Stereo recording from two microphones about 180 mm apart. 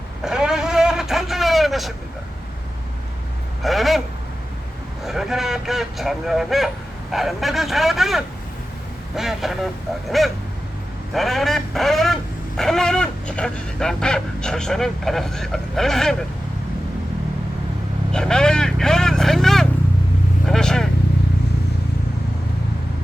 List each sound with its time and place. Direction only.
0.3 s vehicle: 5° right (ahead or behind)
3.6 s speech: centre (ahead or behind)
5.0 s speech: centre (ahead or behind)
11.1 s a sound: centre (ahead or behind)
18.1 s speech: 5° left (ahead or behind)
20.5 s vehicle: 5° left (ahead or behind)